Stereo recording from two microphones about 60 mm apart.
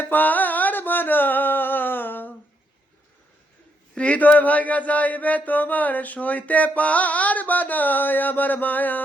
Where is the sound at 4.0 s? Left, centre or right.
Left.